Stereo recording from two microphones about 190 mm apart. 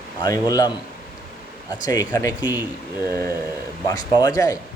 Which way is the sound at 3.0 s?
20° left (ahead or behind).